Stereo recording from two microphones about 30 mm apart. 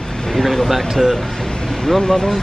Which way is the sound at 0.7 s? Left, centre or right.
Centre.